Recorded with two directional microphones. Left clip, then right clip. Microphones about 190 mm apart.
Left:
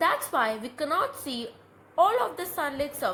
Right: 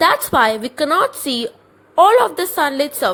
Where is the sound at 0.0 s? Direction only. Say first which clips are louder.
Right 11 dB; 50° right (ahead or behind).